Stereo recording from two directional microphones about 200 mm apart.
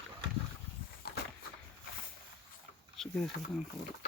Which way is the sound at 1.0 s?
50° left (ahead or behind).